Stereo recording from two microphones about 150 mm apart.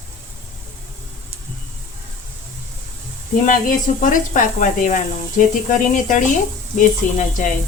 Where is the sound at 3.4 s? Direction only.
65° left (ahead or behind).